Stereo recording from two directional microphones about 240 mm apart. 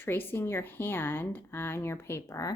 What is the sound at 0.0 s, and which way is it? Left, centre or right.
Speech, centre.